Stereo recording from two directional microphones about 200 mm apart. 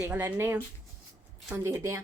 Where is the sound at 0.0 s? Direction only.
10° right (ahead or behind).